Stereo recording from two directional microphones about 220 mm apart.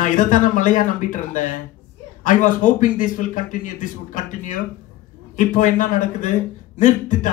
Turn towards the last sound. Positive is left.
turn(degrees=35)  # may be behind; listen again after turning